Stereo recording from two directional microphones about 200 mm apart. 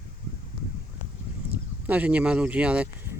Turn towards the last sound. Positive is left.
turn(degrees=-5)  # may be behind; listen again after turning